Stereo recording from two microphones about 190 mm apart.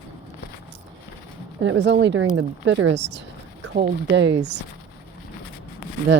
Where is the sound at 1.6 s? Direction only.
70° right (ahead or behind).